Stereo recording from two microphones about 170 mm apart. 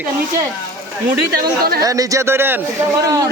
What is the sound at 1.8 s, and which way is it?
A man's voice, 20° right (ahead or behind).